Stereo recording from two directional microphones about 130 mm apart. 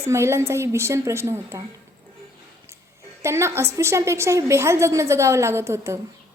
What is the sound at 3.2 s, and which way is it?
A woman's voice, 20° right (ahead or behind).